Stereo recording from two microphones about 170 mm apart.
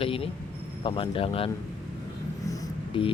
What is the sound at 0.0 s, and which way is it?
Speech, 35° left (ahead or behind).